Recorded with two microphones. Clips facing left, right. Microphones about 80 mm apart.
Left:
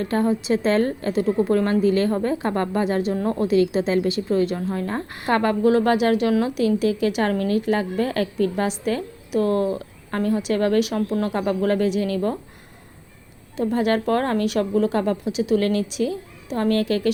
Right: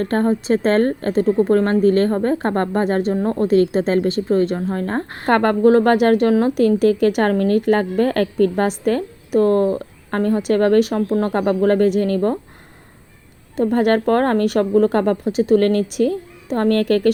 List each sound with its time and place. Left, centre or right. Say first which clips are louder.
0.0 s a woman's voice: right 3 dB; right
13.6 s a woman's voice: right 5 dB; right